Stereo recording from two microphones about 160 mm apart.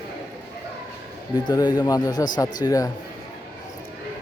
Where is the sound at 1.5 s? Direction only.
25° left (ahead or behind).